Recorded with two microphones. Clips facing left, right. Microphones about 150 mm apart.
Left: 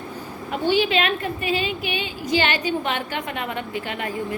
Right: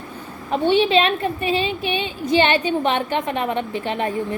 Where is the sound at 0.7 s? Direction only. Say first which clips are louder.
Right 3 dB; 25° right (ahead or behind).